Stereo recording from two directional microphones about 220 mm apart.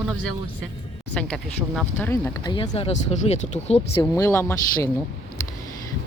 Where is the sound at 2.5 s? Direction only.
25° left (ahead or behind).